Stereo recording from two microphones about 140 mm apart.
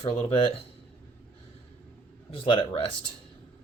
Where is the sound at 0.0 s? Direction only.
40° left (ahead or behind).